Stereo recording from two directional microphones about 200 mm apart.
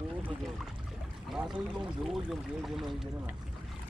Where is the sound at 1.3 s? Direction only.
Centre (ahead or behind).